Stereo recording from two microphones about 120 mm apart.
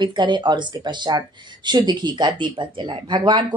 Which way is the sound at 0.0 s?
40° right (ahead or behind).